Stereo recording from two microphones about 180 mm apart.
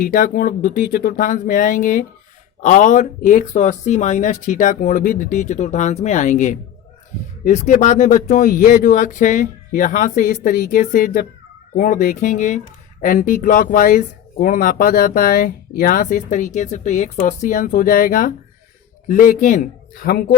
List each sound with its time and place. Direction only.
0.0 s speech: 50° left (ahead or behind)